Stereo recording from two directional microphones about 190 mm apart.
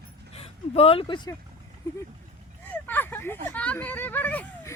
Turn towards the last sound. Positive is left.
turn(degrees=10)  # may be behind; listen again after turning